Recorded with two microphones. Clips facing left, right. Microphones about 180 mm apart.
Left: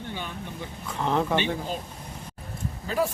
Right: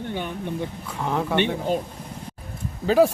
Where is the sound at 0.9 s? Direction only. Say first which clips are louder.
Left 2 dB; 5° right (ahead or behind).